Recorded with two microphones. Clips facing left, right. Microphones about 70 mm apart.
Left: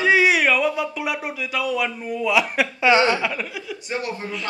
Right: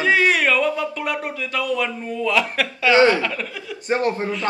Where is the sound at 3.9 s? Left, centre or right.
Right.